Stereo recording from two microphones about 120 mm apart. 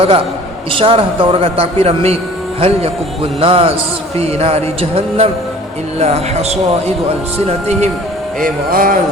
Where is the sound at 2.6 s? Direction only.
60° right (ahead or behind).